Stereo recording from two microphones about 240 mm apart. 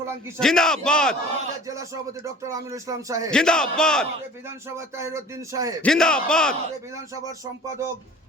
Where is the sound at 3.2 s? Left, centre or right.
Centre.